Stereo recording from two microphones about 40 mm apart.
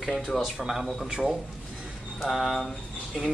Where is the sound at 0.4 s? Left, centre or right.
Centre.